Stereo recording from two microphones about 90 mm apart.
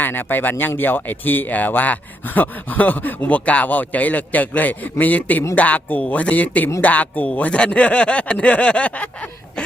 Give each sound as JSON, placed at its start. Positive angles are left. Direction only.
{"t": 0.0, "sound": "speech", "side_deg": 20}